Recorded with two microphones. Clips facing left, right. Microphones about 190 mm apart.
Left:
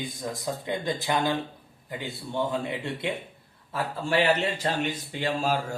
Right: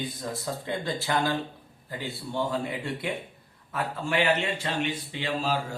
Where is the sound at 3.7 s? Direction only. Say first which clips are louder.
Left 2 dB; 35° left (ahead or behind).